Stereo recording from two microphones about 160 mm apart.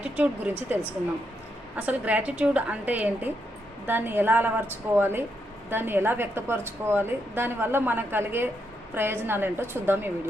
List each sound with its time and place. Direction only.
0.0 s speech: 5° right (ahead or behind)
1.7 s a woman's voice: 10° right (ahead or behind)